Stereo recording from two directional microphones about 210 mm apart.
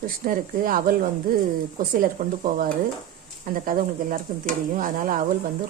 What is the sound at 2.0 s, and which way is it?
Speech, 40° right (ahead or behind).